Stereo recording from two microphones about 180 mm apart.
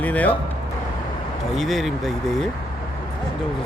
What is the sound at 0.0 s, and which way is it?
Speech, 10° left (ahead or behind).